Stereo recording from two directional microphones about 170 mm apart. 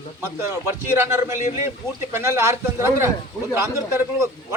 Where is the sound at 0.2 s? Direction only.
15° right (ahead or behind).